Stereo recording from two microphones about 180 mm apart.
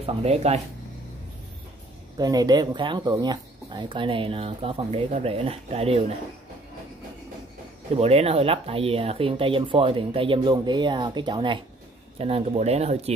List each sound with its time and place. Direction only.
0.0 s speech: 35° right (ahead or behind)
2.1 s speech: 20° right (ahead or behind)
7.9 s speech: 35° right (ahead or behind)